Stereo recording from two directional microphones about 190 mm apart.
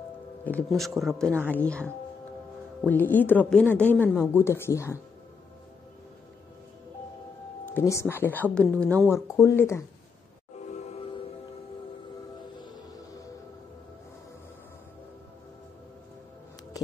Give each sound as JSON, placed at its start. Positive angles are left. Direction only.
{"t": 0.5, "sound": "a woman's voice", "side_deg": 5}
{"t": 7.6, "sound": "a woman's voice", "side_deg": 15}
{"t": 10.7, "sound": "music", "side_deg": 30}